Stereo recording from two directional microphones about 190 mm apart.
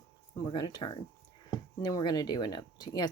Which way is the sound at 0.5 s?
20° left (ahead or behind).